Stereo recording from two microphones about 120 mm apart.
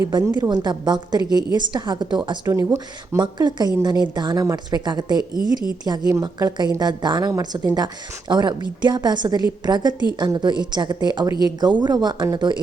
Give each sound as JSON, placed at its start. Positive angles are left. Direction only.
{"t": 0.4, "sound": "a woman's voice", "side_deg": -35}
{"t": 2.5, "sound": "speech", "side_deg": -25}
{"t": 3.2, "sound": "a woman's voice", "side_deg": -35}